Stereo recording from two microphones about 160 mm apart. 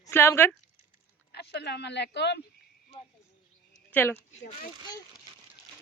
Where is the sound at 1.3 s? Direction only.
90° left.